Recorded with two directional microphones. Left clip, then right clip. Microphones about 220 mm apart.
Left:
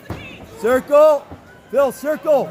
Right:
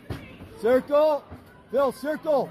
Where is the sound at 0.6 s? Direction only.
15° left (ahead or behind).